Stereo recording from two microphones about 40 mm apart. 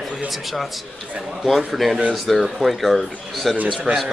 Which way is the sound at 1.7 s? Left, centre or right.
Centre.